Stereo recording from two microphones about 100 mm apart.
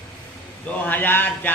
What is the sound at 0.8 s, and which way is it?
Speech, 20° left (ahead or behind).